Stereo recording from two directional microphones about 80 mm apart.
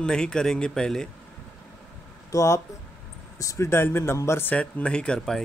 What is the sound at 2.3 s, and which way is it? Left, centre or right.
Speech, left.